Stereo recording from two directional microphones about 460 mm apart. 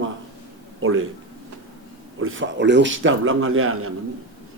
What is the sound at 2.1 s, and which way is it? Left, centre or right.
A man's voice, right.